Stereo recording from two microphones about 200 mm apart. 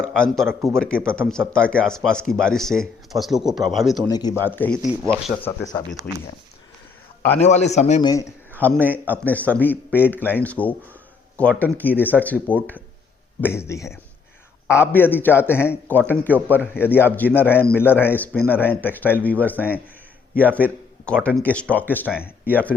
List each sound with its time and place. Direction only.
0.0 s speech: 5° left (ahead or behind)
4.1 s speech: 20° left (ahead or behind)
4.4 s a man's voice: 10° left (ahead or behind)
7.4 s a man's voice: 35° left (ahead or behind)
8.0 s a man's voice: 15° left (ahead or behind)